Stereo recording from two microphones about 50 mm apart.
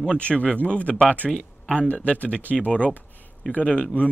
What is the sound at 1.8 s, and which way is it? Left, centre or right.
Speech, left.